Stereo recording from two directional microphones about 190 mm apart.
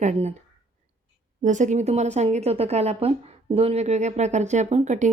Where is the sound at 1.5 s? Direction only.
40° right (ahead or behind).